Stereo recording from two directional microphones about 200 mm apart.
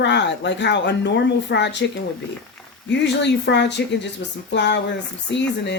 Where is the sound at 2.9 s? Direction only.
60° left (ahead or behind).